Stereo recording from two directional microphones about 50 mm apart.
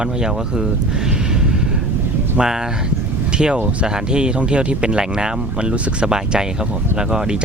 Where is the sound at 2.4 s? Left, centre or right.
Centre.